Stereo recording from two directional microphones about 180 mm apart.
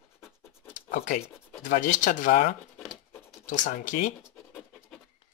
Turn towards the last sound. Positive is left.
turn(degrees=45)  # may be behind; listen again after turning